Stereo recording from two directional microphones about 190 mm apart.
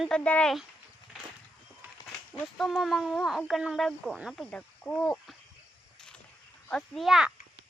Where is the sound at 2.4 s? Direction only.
Centre (ahead or behind).